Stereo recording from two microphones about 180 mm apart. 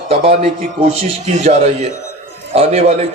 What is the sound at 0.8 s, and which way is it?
A man's voice, 40° right (ahead or behind).